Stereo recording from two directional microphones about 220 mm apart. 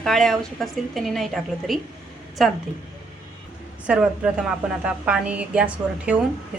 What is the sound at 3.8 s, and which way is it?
A woman's voice, 5° right (ahead or behind).